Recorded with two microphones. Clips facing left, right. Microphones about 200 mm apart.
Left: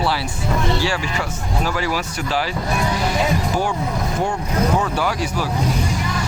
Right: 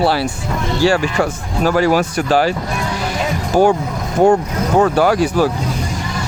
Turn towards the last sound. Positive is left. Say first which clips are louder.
# right 8 dB
turn(degrees=-50)  # may be behind; listen again after turning